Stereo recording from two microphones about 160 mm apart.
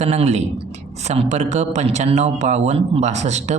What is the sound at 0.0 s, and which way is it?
A man's voice, 40° right (ahead or behind).